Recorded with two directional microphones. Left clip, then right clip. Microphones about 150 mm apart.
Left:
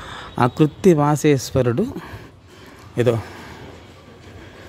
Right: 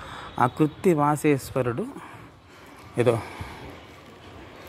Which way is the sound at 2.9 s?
25° left (ahead or behind).